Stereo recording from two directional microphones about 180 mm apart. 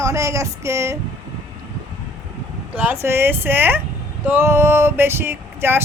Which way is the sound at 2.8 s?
10° right (ahead or behind).